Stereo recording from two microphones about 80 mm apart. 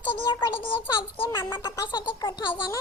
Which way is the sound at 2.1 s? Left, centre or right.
Left.